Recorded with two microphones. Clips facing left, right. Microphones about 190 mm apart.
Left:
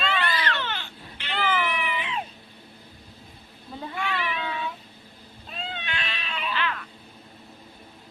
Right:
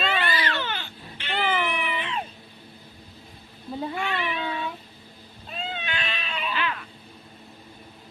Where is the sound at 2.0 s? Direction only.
5° left (ahead or behind).